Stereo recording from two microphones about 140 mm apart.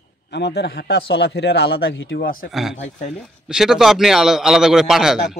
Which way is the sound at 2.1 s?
90° left.